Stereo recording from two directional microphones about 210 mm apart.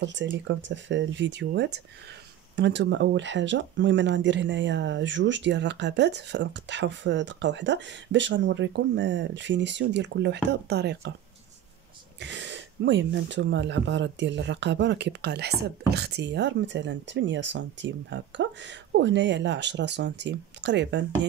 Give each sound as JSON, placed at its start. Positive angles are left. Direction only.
{"t": 0.0, "sound": "speech", "side_deg": -60}
{"t": 12.2, "sound": "speech", "side_deg": -55}